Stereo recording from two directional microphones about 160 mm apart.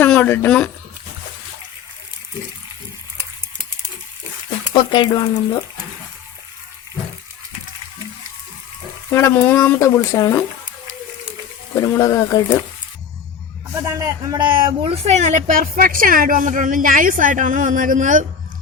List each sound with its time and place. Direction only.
0.0 s speech: 10° left (ahead or behind)
4.7 s speech: 30° left (ahead or behind)
9.1 s speech: 15° left (ahead or behind)
11.8 s speech: 20° left (ahead or behind)
13.7 s speech: 20° right (ahead or behind); by 15.2 s 40° right (ahead or behind)
15.4 s speech: 60° right (ahead or behind)